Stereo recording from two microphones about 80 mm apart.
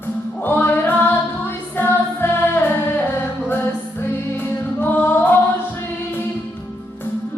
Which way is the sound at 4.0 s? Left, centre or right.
Left.